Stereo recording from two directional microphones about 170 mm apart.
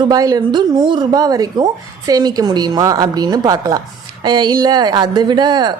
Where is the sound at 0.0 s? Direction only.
20° right (ahead or behind).